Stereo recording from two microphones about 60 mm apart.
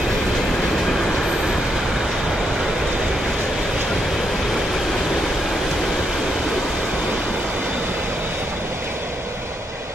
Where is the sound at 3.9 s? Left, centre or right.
Centre.